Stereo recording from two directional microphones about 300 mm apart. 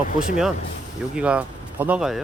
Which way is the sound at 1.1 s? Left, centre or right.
Centre.